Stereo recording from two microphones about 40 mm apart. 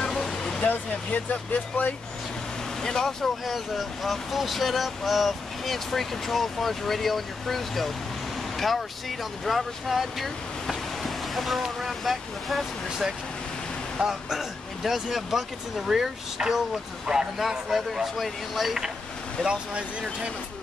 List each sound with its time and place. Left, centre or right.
0.1 s vehicle: centre
0.6 s speech: left
2.8 s speech: centre
3.4 s speech: centre
13.9 s speech: centre
14.8 s speech: centre
19.4 s speech: right